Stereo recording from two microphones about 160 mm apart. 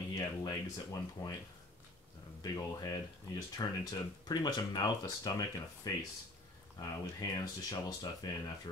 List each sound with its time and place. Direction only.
0.2 s speech: 20° left (ahead or behind)
2.4 s speech: 25° left (ahead or behind)